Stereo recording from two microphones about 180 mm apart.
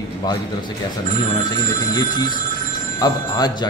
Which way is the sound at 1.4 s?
25° left (ahead or behind).